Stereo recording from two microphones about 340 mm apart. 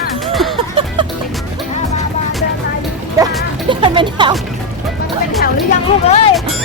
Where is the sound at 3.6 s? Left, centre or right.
Centre.